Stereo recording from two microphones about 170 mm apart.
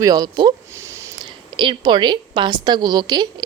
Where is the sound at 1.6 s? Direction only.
30° right (ahead or behind).